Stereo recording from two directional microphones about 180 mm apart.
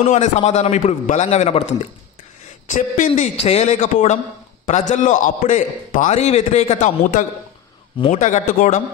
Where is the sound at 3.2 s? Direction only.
35° left (ahead or behind).